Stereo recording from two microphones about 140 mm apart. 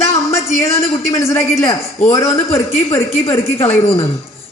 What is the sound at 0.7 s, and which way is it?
A man's voice, 20° left (ahead or behind).